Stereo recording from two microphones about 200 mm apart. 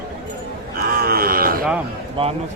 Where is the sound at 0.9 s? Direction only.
50° right (ahead or behind).